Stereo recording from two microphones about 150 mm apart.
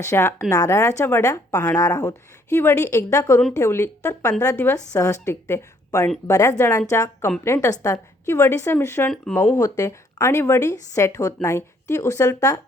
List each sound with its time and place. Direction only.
0.0 s a woman's voice: 20° left (ahead or behind)
9.6 s a woman's voice: 20° left (ahead or behind)